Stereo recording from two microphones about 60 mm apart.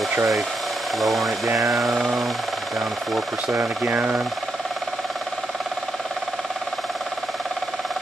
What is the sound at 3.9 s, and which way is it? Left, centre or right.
Speech, right.